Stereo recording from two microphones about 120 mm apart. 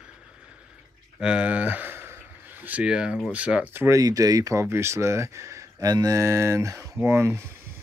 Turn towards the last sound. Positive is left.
turn(degrees=-20)  # may be behind; listen again after turning